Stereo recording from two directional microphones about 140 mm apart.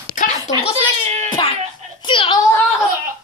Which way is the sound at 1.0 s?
50° right (ahead or behind).